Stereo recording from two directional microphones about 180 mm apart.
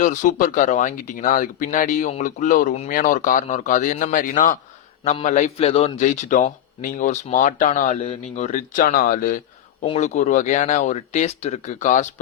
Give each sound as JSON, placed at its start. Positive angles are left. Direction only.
{"t": 0.0, "sound": "speech", "side_deg": 45}
{"t": 9.8, "sound": "speech", "side_deg": 35}